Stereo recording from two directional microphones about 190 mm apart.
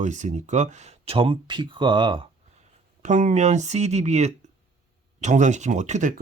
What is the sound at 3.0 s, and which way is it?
Speech, 40° right (ahead or behind).